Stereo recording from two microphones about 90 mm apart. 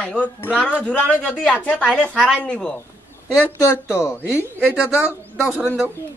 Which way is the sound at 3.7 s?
30° left (ahead or behind).